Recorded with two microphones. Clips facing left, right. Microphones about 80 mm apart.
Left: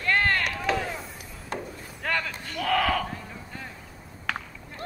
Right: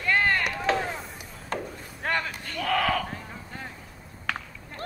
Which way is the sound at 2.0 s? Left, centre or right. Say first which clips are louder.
Right 1 dB; right.